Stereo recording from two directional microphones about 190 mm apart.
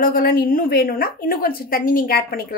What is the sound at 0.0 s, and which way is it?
A woman's voice, 50° left (ahead or behind).